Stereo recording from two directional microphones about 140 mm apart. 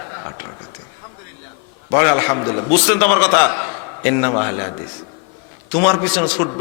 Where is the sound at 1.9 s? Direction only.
20° left (ahead or behind).